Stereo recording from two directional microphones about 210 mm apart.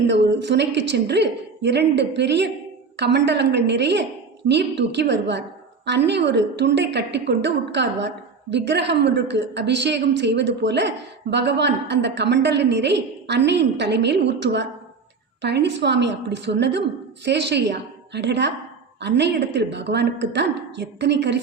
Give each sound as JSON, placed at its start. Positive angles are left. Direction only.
{"t": 0.1, "sound": "a woman's voice", "side_deg": -55}